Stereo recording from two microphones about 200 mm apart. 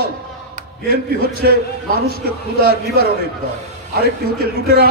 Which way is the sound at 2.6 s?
50° right (ahead or behind).